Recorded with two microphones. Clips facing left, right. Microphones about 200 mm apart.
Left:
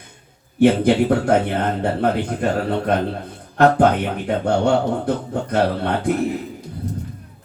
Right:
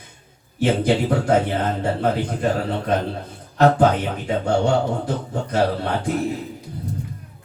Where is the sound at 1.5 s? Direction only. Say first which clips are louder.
Left 1 dB; 60° left (ahead or behind).